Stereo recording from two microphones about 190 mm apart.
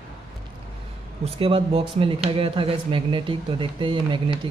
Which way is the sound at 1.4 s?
30° right (ahead or behind).